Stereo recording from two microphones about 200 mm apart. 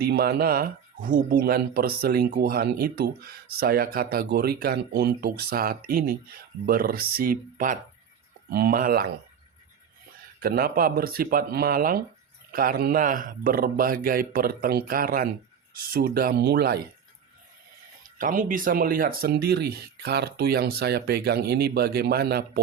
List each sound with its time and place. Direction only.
0.0 s speech: 50° right (ahead or behind)
10.4 s speech: 50° right (ahead or behind)
18.2 s speech: 40° right (ahead or behind)